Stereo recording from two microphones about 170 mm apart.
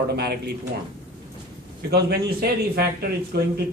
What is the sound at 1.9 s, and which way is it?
A man's voice, 65° right (ahead or behind).